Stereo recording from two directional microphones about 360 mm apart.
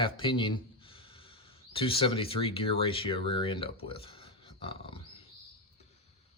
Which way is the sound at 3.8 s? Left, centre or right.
Centre.